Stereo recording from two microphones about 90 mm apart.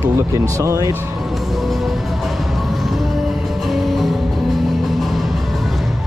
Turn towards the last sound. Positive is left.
turn(degrees=0)  # may be behind; listen again after turning